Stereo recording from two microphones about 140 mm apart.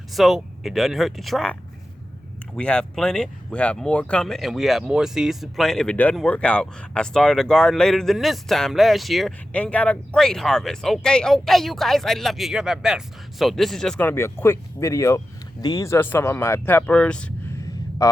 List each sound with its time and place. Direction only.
0.1 s speech: centre (ahead or behind)
2.6 s speech: 5° left (ahead or behind)
18.0 s speech: 25° left (ahead or behind)